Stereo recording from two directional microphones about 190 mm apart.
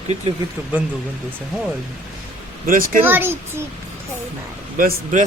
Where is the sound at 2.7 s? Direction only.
45° right (ahead or behind).